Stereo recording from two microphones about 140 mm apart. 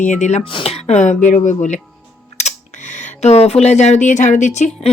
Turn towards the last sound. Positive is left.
turn(degrees=60)  # may be behind; listen again after turning